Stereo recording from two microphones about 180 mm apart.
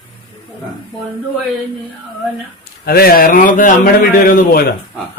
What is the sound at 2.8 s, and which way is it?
Speech, 60° left (ahead or behind).